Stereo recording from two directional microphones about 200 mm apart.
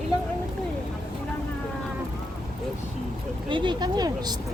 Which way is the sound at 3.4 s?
25° right (ahead or behind).